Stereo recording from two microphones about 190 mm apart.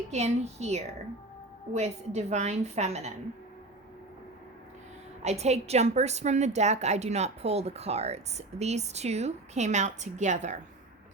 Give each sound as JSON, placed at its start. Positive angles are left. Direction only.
{"t": 0.1, "sound": "a woman's voice", "side_deg": -35}
{"t": 5.2, "sound": "a woman's voice", "side_deg": -35}